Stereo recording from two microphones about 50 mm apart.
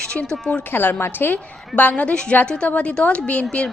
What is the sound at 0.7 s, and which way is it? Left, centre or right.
Speech, left.